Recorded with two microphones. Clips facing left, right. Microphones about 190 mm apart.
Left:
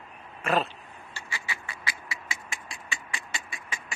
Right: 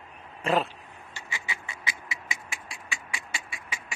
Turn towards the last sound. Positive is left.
turn(degrees=-10)  # may be behind; listen again after turning